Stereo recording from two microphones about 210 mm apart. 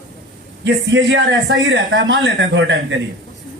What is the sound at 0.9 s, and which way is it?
A man's voice, 65° right (ahead or behind).